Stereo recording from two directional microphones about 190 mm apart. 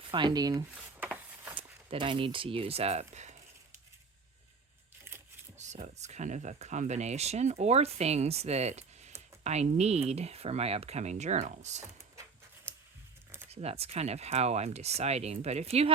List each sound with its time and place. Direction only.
0.1 s speech: 25° right (ahead or behind)
0.7 s a sound: 10° right (ahead or behind)
1.5 s speech: 25° right (ahead or behind)
5.5 s speech: 40° right (ahead or behind)
13.5 s speech: 35° right (ahead or behind)